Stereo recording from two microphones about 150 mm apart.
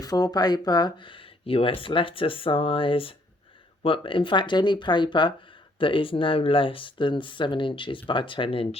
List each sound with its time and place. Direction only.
0.0 s speech: 25° left (ahead or behind)